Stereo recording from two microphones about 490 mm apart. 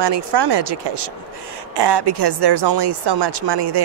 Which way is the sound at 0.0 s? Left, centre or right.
Right.